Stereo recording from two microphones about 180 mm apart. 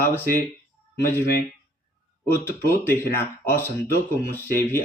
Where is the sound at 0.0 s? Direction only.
10° left (ahead or behind).